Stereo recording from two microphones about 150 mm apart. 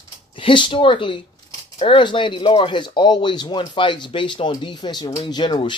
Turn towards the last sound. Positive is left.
turn(degrees=30)  # may be behind; listen again after turning